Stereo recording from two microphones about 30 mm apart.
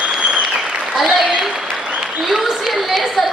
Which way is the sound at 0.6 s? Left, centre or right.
Right.